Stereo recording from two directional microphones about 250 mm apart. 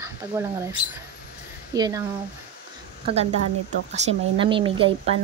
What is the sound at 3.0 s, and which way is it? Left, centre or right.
Speech, right.